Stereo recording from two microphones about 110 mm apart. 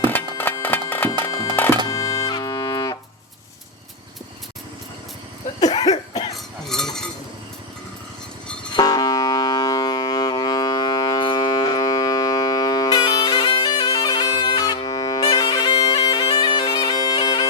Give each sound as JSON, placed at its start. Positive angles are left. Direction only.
{"t": 0.0, "sound": "music", "side_deg": 20}
{"t": 1.9, "sound": "music", "side_deg": 30}
{"t": 5.5, "sound": "cough", "side_deg": 35}
{"t": 6.3, "sound": "a sound", "side_deg": 5}
{"t": 8.7, "sound": "music", "side_deg": 35}